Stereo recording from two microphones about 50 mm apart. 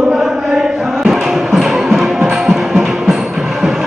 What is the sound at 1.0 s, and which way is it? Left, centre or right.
Music, centre.